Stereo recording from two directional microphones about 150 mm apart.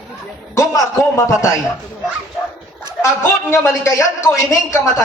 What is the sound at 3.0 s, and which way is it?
A man's voice, 20° left (ahead or behind).